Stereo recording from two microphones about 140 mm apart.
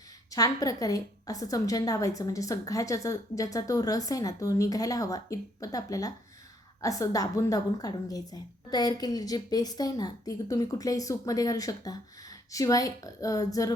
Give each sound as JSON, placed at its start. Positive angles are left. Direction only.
{"t": 0.3, "sound": "a woman's voice", "side_deg": 25}